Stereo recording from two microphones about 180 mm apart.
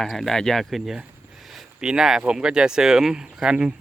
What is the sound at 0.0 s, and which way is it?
Speech, centre (ahead or behind).